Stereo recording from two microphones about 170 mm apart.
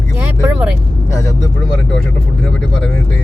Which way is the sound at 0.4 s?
5° right (ahead or behind).